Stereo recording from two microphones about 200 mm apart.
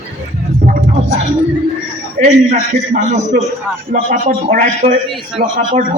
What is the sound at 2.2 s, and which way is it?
A man's voice, 35° right (ahead or behind).